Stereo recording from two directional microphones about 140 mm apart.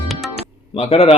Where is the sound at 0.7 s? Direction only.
45° left (ahead or behind).